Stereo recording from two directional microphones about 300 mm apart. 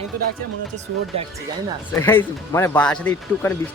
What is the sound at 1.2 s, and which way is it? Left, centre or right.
Speech, centre.